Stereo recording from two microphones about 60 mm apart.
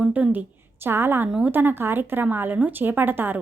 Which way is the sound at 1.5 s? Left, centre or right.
Right.